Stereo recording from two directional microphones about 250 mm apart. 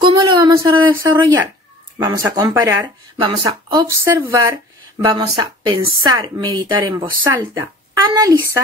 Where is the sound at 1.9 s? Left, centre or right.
Centre.